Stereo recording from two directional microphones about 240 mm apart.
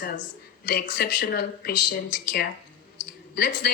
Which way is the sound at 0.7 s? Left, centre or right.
Left.